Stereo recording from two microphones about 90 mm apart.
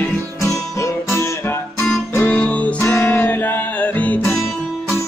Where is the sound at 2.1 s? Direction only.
15° left (ahead or behind).